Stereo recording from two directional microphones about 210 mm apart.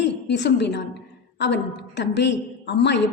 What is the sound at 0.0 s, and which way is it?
A woman's voice, 55° left (ahead or behind).